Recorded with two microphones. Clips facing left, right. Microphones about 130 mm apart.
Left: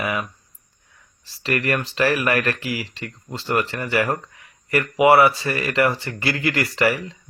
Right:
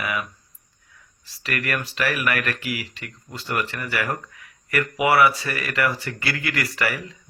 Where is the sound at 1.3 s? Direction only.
30° left (ahead or behind).